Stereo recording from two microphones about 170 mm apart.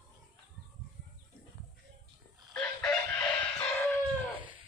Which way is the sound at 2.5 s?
5° left (ahead or behind).